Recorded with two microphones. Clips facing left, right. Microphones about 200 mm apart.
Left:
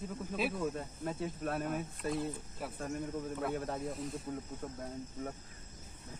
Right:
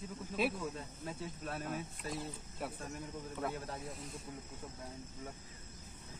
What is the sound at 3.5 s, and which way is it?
Speech, 55° left (ahead or behind).